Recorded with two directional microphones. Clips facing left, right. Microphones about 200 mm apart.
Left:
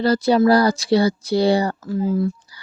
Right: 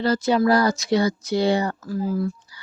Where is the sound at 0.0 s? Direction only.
35° left (ahead or behind).